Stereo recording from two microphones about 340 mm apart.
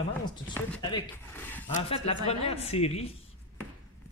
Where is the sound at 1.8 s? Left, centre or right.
Centre.